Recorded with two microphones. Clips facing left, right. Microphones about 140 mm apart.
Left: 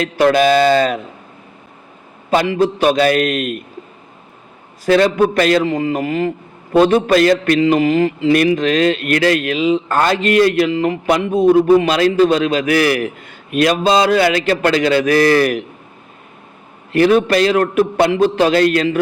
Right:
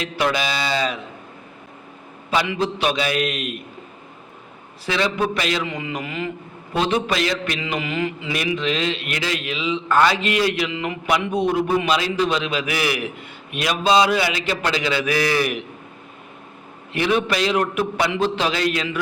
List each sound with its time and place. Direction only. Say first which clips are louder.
0.0 s a man's voice: left 10 dB; 50° left (ahead or behind)
2.3 s a man's voice: left 7 dB; 45° left (ahead or behind)
4.9 s a man's voice: left 9 dB; 45° left (ahead or behind)
16.9 s a man's voice: left 9 dB; 45° left (ahead or behind)